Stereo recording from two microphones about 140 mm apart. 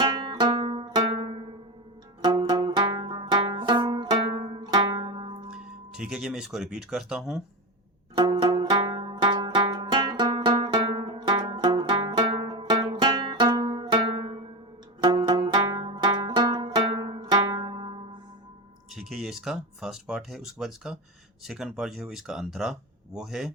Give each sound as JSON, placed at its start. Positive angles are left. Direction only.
{"t": 0.0, "sound": "zither", "side_deg": -30}
{"t": 2.2, "sound": "banjo", "side_deg": -30}
{"t": 5.5, "sound": "speech", "side_deg": -5}
{"t": 8.1, "sound": "music", "side_deg": -30}
{"t": 18.9, "sound": "speech", "side_deg": 0}